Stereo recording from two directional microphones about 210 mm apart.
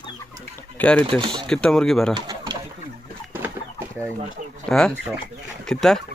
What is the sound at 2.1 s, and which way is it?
Pigeon, 20° right (ahead or behind).